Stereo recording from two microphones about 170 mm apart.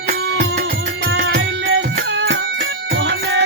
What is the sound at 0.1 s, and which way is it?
Music, 75° right (ahead or behind).